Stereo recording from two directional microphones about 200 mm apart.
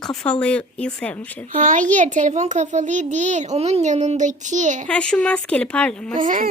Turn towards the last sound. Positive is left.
turn(degrees=-40)  # may be behind; listen again after turning